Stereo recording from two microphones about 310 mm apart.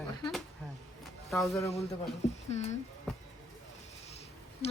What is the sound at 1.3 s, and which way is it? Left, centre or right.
Speech, centre.